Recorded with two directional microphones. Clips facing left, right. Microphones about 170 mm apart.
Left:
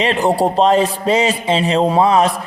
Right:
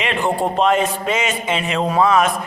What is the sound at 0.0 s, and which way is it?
A man's voice, 35° left (ahead or behind).